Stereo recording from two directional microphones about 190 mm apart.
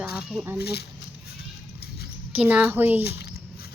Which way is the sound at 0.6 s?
60° left (ahead or behind).